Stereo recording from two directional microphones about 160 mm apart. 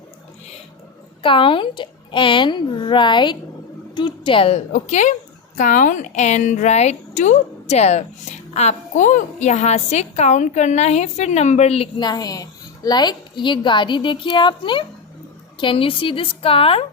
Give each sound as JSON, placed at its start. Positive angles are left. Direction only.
{"t": 1.2, "sound": "speech", "side_deg": 35}
{"t": 4.7, "sound": "a woman's voice", "side_deg": 50}
{"t": 11.9, "sound": "a woman's voice", "side_deg": 25}